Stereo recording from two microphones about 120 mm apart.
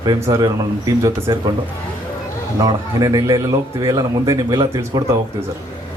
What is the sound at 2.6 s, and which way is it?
A man's voice, 30° right (ahead or behind).